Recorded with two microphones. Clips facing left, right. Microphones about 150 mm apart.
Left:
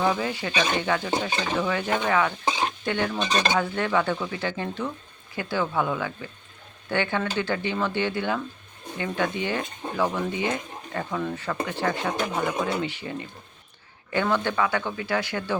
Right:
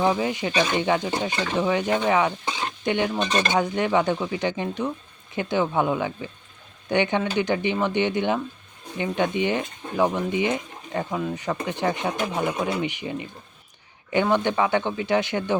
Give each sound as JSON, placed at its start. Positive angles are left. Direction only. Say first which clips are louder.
{"t": 0.0, "sound": "speech", "louder": "right 3 dB", "side_deg": -20}